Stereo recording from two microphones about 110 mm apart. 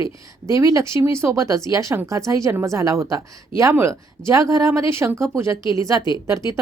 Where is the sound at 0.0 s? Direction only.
30° right (ahead or behind).